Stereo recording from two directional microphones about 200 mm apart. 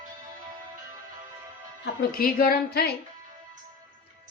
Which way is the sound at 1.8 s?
50° left (ahead or behind).